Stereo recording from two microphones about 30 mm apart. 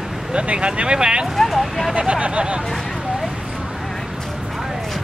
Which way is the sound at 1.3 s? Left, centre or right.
Centre.